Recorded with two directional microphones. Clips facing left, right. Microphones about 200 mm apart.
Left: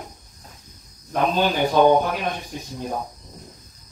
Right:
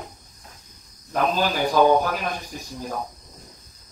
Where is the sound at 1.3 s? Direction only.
25° left (ahead or behind).